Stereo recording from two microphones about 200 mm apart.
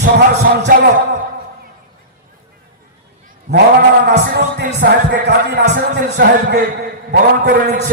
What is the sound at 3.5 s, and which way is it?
Cat, 35° right (ahead or behind).